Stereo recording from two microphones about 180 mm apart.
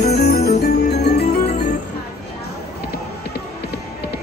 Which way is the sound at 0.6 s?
65° left (ahead or behind).